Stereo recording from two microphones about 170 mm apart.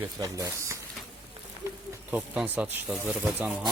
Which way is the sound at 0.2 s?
20° right (ahead or behind).